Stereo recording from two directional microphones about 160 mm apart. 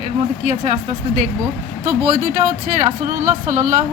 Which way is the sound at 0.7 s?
50° right (ahead or behind).